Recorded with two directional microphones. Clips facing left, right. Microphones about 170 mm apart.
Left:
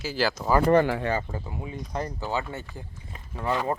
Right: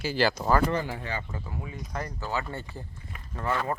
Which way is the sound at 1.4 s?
20° left (ahead or behind).